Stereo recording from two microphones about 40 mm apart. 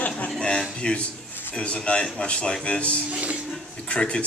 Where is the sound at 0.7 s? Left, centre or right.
Left.